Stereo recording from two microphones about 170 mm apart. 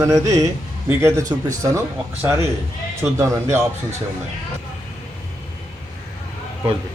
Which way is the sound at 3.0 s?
20° right (ahead or behind).